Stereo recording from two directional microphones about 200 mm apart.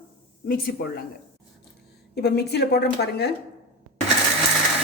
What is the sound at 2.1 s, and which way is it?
A woman's voice, 55° left (ahead or behind).